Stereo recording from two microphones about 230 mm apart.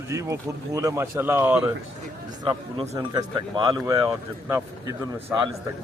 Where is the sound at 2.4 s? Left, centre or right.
Centre.